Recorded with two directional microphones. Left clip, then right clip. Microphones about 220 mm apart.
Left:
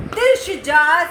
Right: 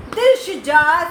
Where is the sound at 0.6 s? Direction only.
15° right (ahead or behind).